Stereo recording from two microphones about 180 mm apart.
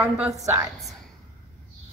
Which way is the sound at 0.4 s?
15° right (ahead or behind).